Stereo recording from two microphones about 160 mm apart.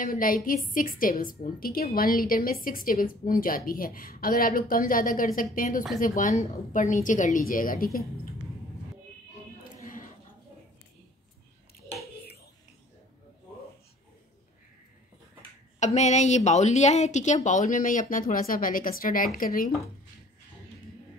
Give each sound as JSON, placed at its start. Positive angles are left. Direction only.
{"t": 0.0, "sound": "a woman's voice", "side_deg": 60}
{"t": 9.7, "sound": "a sound", "side_deg": 55}
{"t": 15.8, "sound": "a woman's voice", "side_deg": 45}